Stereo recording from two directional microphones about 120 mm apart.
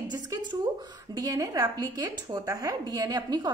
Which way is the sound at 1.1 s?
30° right (ahead or behind).